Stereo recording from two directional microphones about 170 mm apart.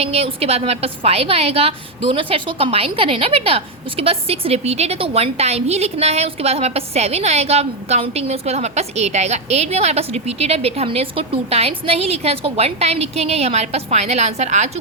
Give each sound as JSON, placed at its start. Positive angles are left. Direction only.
{"t": 0.0, "sound": "a woman's voice", "side_deg": -35}